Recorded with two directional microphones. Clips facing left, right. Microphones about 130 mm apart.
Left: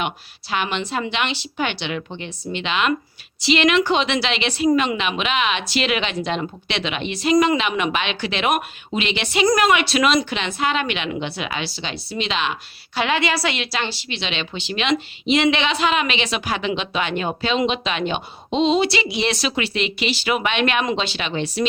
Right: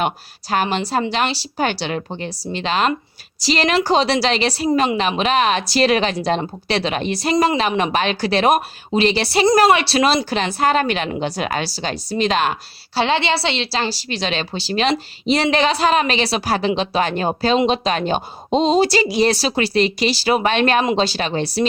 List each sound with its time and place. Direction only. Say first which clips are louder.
0.5 s a woman's voice: right 4 dB; 40° right (ahead or behind)
13.0 s a woman's voice: right 3 dB; 30° right (ahead or behind)